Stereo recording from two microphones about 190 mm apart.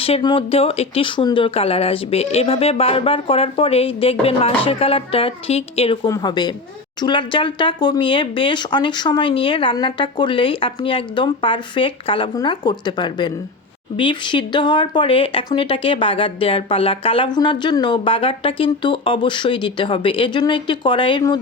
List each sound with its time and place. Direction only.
0.0 s speech: 25° left (ahead or behind)
6.1 s speech: 20° left (ahead or behind)